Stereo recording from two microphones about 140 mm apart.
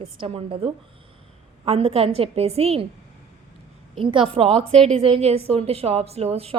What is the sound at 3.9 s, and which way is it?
A woman's voice, 40° right (ahead or behind).